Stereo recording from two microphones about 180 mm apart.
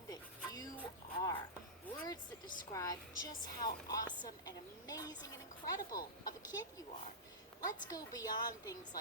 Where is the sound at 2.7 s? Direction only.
20° left (ahead or behind).